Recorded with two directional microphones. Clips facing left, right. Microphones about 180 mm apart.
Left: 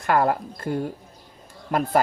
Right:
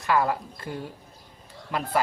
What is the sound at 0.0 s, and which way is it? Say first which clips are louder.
Speech: left 3 dB; 50° left (ahead or behind).